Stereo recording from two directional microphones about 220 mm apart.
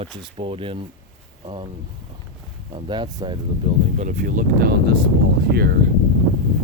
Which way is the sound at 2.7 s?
20° right (ahead or behind).